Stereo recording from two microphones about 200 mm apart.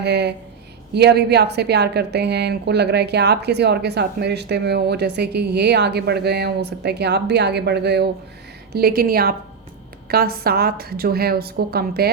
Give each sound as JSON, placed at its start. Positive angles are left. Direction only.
{"t": 0.0, "sound": "a woman's voice", "side_deg": -55}